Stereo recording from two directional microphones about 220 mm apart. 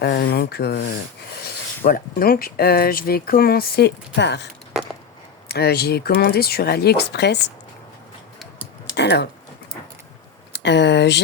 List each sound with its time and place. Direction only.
0.0 s rub: 45° left (ahead or behind)
1.4 s speech: 40° left (ahead or behind)
5.5 s speech: 45° left (ahead or behind)
9.0 s speech: 50° left (ahead or behind)
10.5 s speech: 50° left (ahead or behind)